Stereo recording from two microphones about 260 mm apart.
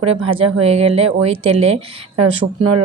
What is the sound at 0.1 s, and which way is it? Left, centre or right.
Speech, right.